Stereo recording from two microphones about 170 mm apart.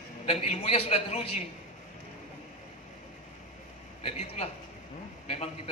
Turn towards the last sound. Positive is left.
turn(degrees=35)  # may be behind; listen again after turning